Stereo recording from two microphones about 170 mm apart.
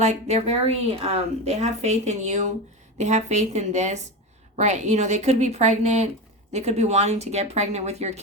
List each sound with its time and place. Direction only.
0.0 s a woman's voice: 40° right (ahead or behind)